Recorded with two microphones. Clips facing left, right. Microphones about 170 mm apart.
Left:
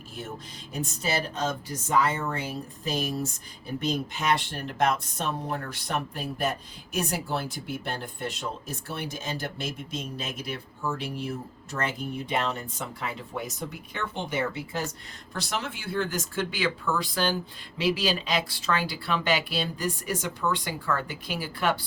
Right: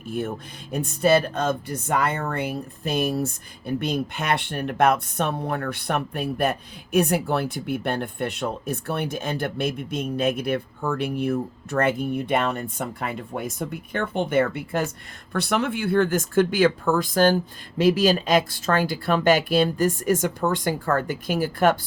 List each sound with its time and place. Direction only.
0.7 s speech: 60° right (ahead or behind)